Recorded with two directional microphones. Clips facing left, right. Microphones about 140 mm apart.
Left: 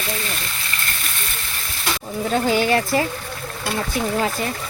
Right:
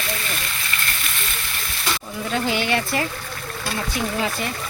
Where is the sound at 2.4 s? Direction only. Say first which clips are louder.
Left 4 dB; 35° left (ahead or behind).